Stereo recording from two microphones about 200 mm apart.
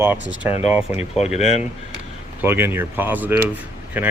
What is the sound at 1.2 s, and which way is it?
Speech, 35° left (ahead or behind).